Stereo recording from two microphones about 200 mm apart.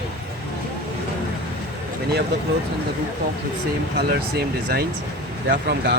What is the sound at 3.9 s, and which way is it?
Speech, 55° right (ahead or behind).